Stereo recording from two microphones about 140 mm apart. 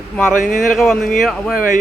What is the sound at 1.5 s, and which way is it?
Speech, 75° left (ahead or behind).